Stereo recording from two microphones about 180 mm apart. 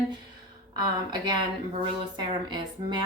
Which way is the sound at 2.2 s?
25° right (ahead or behind).